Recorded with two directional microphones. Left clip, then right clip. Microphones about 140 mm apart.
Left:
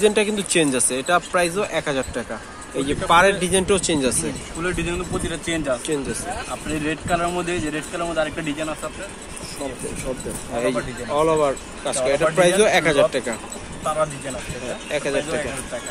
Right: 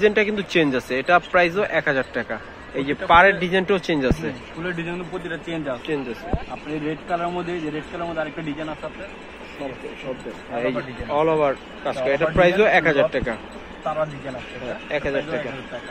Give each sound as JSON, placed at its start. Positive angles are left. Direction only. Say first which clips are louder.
{"t": 0.0, "sound": "speech", "louder": "even", "side_deg": 15}
{"t": 10.5, "sound": "speech", "louder": "left 2 dB", "side_deg": 25}
{"t": 11.1, "sound": "speech", "louder": "even", "side_deg": 15}
{"t": 14.9, "sound": "speech", "louder": "left 1 dB", "side_deg": 20}